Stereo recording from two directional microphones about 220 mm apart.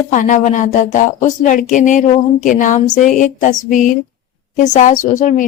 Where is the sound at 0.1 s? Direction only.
35° left (ahead or behind).